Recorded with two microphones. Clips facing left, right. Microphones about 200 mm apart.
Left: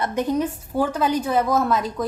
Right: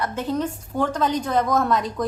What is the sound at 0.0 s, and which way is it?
A woman's voice, 15° left (ahead or behind).